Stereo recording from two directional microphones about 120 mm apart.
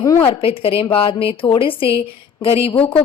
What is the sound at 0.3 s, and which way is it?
A woman's voice, 55° left (ahead or behind).